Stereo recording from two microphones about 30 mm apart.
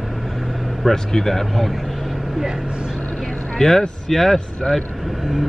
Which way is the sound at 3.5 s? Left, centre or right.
Centre.